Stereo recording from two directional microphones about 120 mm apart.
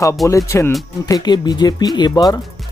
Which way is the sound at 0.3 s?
25° left (ahead or behind).